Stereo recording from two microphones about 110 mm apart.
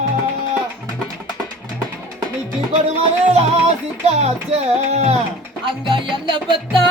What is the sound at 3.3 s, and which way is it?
Music, 80° right.